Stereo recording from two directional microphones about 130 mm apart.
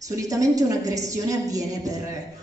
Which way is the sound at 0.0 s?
25° right (ahead or behind).